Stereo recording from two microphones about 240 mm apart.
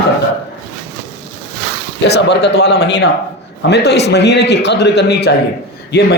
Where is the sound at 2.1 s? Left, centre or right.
Left.